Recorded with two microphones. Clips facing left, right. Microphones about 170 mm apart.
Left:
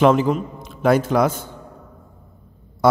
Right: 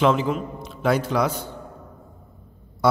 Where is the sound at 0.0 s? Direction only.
50° left (ahead or behind).